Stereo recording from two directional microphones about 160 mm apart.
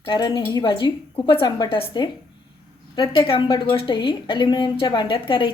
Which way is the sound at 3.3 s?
35° left (ahead or behind).